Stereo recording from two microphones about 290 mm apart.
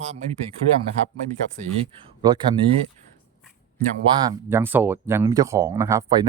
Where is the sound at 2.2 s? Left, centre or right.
Centre.